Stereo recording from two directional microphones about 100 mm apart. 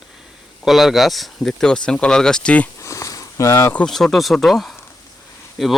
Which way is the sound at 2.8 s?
30° left (ahead or behind).